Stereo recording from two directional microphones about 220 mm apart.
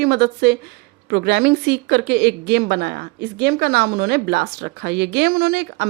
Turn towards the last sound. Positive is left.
turn(degrees=-45)  # may be behind; listen again after turning